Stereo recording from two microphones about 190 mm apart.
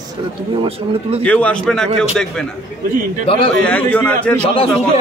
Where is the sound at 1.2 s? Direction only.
5° left (ahead or behind).